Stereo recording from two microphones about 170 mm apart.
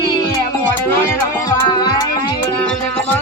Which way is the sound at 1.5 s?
25° left (ahead or behind).